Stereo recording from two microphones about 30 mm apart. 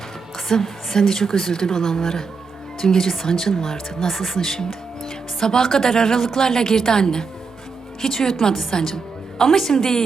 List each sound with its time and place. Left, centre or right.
0.3 s a woman's voice: centre
4.7 s music: centre
5.5 s a woman's voice: centre